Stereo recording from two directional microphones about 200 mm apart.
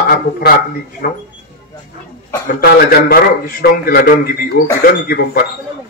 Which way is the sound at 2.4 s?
50° left (ahead or behind).